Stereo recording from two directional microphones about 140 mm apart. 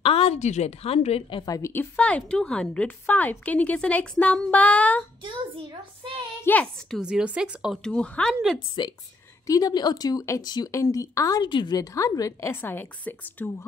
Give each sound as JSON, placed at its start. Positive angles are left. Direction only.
{"t": 0.0, "sound": "a woman's voice", "side_deg": 45}
{"t": 1.4, "sound": "speech", "side_deg": 25}
{"t": 1.7, "sound": "a woman's voice", "side_deg": 10}
{"t": 6.4, "sound": "a woman's voice", "side_deg": 10}
{"t": 7.0, "sound": "a woman's voice", "side_deg": -5}
{"t": 8.8, "sound": "speech", "side_deg": 35}